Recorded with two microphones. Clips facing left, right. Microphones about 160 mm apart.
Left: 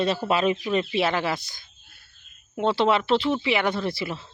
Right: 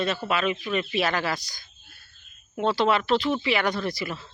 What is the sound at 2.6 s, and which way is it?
Speech, 25° left (ahead or behind).